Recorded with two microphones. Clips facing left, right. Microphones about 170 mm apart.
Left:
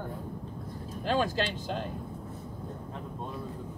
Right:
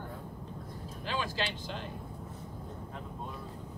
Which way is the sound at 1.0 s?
45° left (ahead or behind).